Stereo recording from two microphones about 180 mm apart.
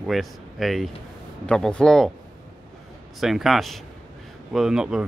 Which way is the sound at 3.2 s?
Centre (ahead or behind).